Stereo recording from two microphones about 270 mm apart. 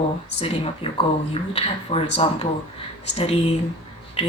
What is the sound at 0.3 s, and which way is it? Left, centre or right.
Speech, left.